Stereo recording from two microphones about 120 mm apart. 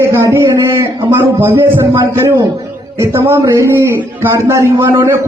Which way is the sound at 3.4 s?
25° right (ahead or behind).